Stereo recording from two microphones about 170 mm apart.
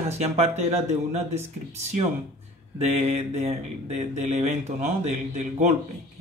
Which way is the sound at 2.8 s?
40° right (ahead or behind).